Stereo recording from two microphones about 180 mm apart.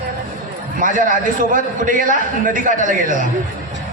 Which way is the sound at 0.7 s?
50° right (ahead or behind).